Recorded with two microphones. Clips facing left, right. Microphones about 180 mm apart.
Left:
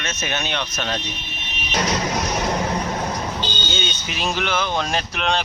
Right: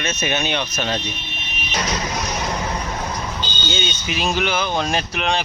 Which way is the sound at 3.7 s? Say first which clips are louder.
Right 3 dB; 5° right (ahead or behind).